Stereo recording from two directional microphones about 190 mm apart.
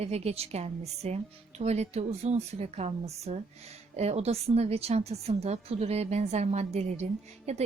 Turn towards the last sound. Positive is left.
turn(degrees=-35)  # may be behind; listen again after turning